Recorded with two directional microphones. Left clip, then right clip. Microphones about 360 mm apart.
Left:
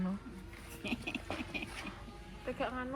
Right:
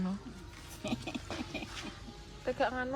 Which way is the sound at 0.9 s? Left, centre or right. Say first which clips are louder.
Even; centre.